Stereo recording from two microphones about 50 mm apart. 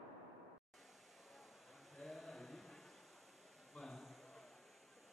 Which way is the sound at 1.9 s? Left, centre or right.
Centre.